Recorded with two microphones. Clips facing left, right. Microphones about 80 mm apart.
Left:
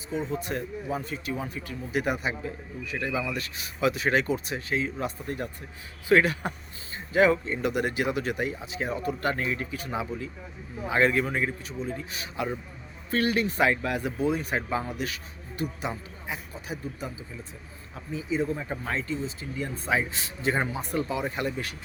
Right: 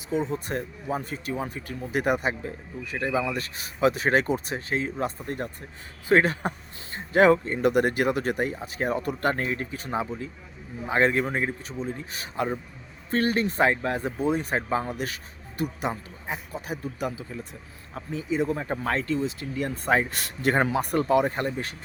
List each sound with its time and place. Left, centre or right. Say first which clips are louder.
0.1 s speech: right 3 dB; right
6.9 s speech: right 3 dB; right
16.8 s speech: right 5 dB; right
17.9 s speech: right 2 dB; right